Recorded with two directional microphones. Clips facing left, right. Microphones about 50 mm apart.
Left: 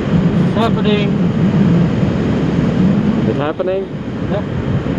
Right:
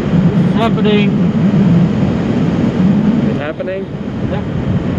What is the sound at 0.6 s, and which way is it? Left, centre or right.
Speech, right.